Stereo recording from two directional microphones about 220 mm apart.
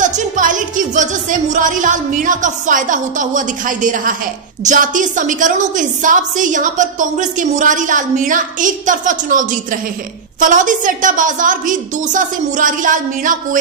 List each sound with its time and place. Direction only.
0.0 s a woman's voice: 35° right (ahead or behind)